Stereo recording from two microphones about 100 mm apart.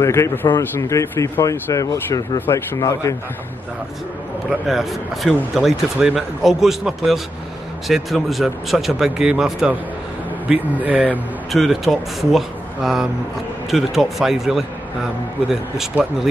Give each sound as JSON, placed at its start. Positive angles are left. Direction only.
{"t": 0.0, "sound": "speech", "side_deg": 30}
{"t": 4.5, "sound": "speech", "side_deg": 0}
{"t": 11.5, "sound": "speech", "side_deg": 0}
{"t": 16.0, "sound": "speech", "side_deg": -20}